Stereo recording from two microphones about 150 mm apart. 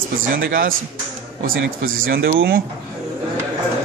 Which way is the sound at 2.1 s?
85° right.